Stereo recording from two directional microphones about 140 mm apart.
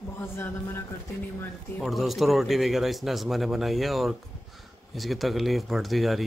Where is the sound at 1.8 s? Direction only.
Centre (ahead or behind).